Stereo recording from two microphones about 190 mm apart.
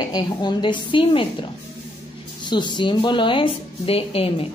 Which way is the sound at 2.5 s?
25° left (ahead or behind).